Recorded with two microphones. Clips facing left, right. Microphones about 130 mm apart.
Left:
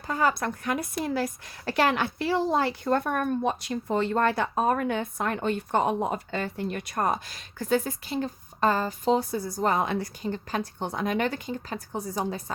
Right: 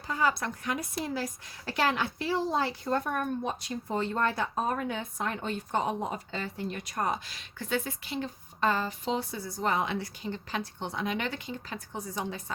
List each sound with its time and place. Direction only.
0.1 s a woman's voice: 50° left (ahead or behind)